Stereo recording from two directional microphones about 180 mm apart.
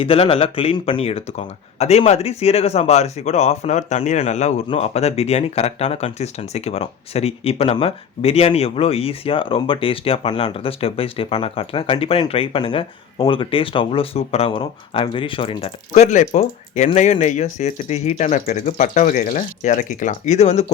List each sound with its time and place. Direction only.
0.0 s speech: 30° left (ahead or behind)